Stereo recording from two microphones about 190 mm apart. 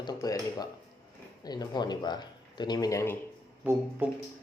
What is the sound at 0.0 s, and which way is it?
Speech, 20° left (ahead or behind).